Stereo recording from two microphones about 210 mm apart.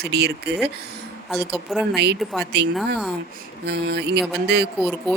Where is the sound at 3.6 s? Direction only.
55° right (ahead or behind).